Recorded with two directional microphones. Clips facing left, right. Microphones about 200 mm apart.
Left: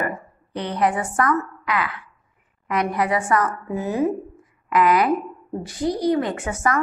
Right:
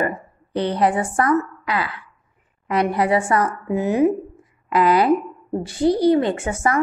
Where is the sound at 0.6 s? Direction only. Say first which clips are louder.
Right 3 dB; 30° right (ahead or behind).